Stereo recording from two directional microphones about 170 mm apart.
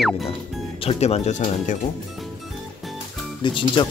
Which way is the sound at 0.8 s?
40° left (ahead or behind).